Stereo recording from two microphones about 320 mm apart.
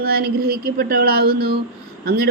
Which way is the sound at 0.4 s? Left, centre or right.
Right.